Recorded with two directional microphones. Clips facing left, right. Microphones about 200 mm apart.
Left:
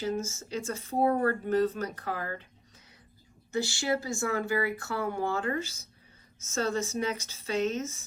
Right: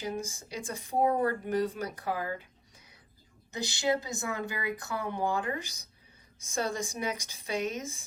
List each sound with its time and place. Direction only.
0.0 s speech: 15° right (ahead or behind)